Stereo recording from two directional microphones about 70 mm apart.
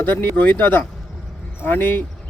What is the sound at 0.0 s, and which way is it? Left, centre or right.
Speech, left.